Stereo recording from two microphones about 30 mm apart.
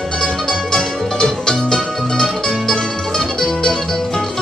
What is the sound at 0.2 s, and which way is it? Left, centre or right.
Music, left.